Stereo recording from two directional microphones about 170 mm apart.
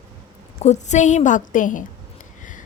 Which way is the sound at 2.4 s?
50° left (ahead or behind).